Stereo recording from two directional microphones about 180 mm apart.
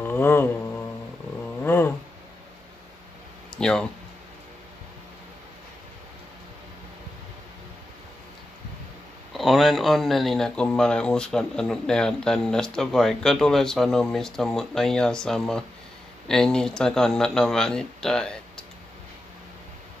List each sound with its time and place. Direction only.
0.0 s mantra: 10° left (ahead or behind)
1.6 s cat: 10° left (ahead or behind)
3.5 s speech: 5° left (ahead or behind)
9.3 s speech: centre (ahead or behind)